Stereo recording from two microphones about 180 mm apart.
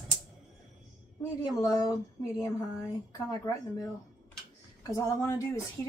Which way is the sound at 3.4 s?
15° left (ahead or behind).